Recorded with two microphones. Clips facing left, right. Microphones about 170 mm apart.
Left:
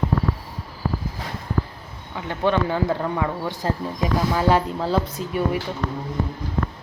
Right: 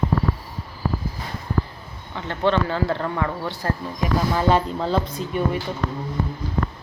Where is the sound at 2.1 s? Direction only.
10° left (ahead or behind).